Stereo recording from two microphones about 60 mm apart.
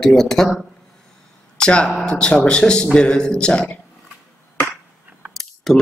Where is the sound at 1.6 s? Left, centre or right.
Centre.